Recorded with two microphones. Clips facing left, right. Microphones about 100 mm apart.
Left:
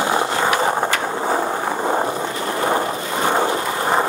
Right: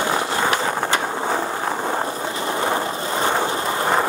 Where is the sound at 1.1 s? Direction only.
5° left (ahead or behind).